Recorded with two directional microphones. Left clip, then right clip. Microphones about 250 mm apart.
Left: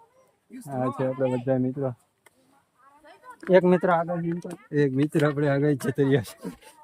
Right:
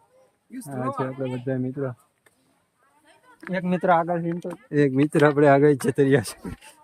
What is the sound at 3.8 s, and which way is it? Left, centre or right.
Speech, centre.